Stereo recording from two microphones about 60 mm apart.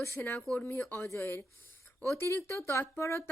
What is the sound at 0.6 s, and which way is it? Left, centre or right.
A woman's voice, left.